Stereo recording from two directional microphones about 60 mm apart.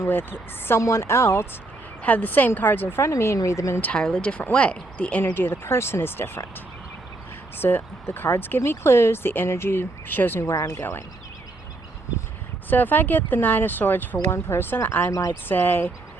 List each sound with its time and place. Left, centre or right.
0.1 s speech: left
0.8 s speech: left
2.0 s speech: left
3.3 s speech: left
4.1 s speech: left
5.2 s speech: left
7.6 s speech: left
10.4 s speech: left
12.7 s speech: left